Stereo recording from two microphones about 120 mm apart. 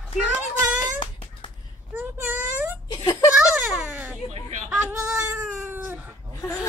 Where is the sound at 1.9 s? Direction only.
15° right (ahead or behind).